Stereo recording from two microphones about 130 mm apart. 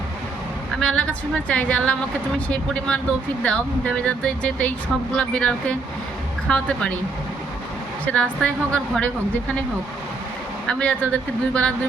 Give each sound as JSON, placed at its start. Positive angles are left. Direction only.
{"t": 0.8, "sound": "speech", "side_deg": 10}
{"t": 8.0, "sound": "speech", "side_deg": 10}
{"t": 10.7, "sound": "speech", "side_deg": 10}